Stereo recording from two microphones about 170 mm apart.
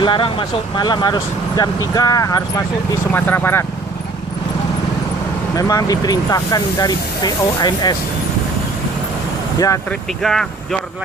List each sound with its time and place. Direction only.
0.0 s speech: 30° left (ahead or behind); by 3.7 s 15° left (ahead or behind)
5.5 s speech: 20° left (ahead or behind)
9.6 s speech: 20° left (ahead or behind)
10.2 s speech: centre (ahead or behind)